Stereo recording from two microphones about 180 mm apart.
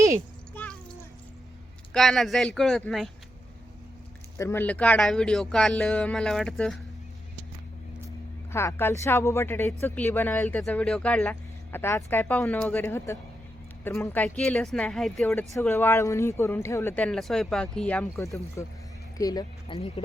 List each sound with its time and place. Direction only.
0.5 s a sound: 10° left (ahead or behind)
1.9 s speech: centre (ahead or behind)
4.4 s speech: 15° left (ahead or behind)
8.5 s speech: 15° left (ahead or behind)